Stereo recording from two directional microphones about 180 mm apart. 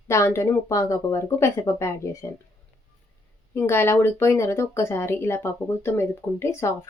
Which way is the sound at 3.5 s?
15° left (ahead or behind).